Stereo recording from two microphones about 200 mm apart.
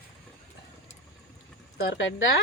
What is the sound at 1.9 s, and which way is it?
Speech, 60° left (ahead or behind).